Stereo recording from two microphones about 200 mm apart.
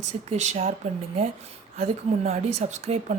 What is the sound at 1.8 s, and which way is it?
Speech, 30° right (ahead or behind).